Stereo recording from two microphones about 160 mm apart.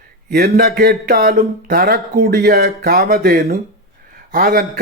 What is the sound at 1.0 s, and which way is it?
Speech, 75° right (ahead or behind).